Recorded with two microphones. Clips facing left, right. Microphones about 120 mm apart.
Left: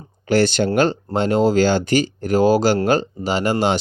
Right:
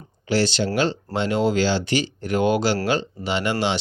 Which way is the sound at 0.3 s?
50° left (ahead or behind).